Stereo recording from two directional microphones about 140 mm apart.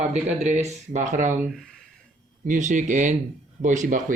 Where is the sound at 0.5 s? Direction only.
55° right (ahead or behind).